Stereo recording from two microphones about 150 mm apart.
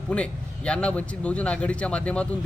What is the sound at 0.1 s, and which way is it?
A man's voice, 5° left (ahead or behind).